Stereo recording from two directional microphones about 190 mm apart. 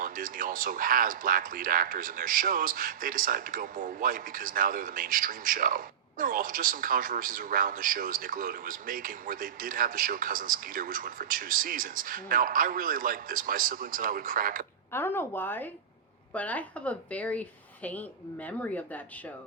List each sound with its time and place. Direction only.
0.0 s speech: 45° right (ahead or behind)
14.9 s a woman's voice: 10° left (ahead or behind)
18.4 s a woman's voice: 10° left (ahead or behind)